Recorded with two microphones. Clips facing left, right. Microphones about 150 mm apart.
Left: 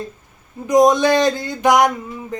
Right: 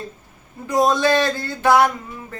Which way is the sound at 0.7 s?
20° left (ahead or behind).